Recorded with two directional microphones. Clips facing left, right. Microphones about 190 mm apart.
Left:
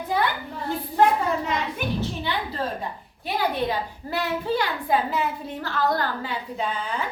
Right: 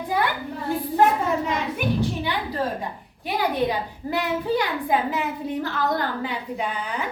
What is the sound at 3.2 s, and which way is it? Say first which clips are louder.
A woman's voice: right 2 dB; 15° right (ahead or behind).